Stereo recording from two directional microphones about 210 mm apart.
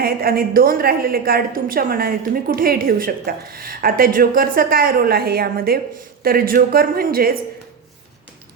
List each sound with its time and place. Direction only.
0.0 s a woman's voice: 45° right (ahead or behind)